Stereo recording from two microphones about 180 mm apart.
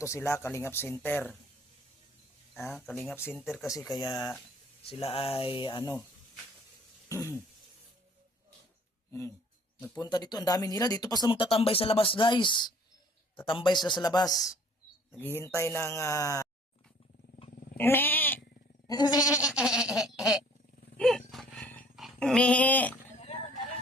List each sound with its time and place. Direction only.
0.0 s speech: 15° left (ahead or behind)
2.7 s speech: 5° left (ahead or behind)
3.3 s a sound: centre (ahead or behind)
3.7 s speech: 20° left (ahead or behind)
4.9 s speech: 35° left (ahead or behind)
9.8 s speech: 20° left (ahead or behind)
17.7 s goat: 10° left (ahead or behind)
18.9 s speech: 20° left (ahead or behind)
19.4 s a sound: 5° right (ahead or behind)
21.5 s dog: 10° left (ahead or behind)
23.2 s horse: 30° left (ahead or behind)